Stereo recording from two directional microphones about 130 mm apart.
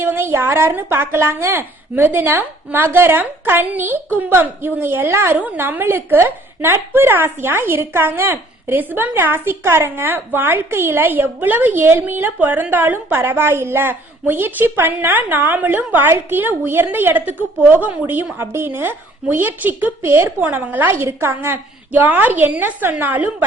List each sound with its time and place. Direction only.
0.0 s a woman's voice: 20° right (ahead or behind)